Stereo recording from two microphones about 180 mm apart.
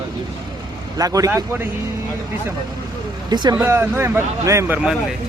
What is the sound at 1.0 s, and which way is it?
Speech, 20° right (ahead or behind).